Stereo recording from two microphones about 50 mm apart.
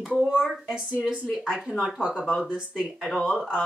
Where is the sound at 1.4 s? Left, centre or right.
Centre.